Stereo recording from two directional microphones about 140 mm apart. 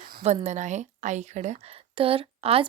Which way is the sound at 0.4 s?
55° right (ahead or behind).